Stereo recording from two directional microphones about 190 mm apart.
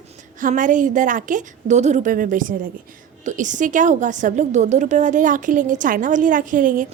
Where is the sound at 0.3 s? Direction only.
45° right (ahead or behind).